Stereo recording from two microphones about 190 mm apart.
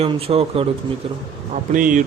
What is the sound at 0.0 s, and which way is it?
Speech, 30° right (ahead or behind).